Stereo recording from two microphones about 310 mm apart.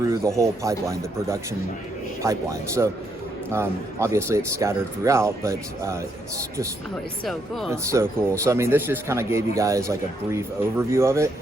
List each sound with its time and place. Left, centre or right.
0.0 s a man's voice: centre
7.3 s a man's voice: centre